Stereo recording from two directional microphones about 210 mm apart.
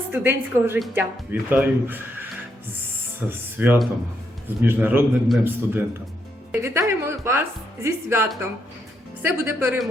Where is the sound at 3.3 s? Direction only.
10° right (ahead or behind).